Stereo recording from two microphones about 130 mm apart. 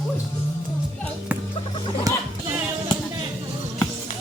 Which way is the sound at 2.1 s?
25° right (ahead or behind).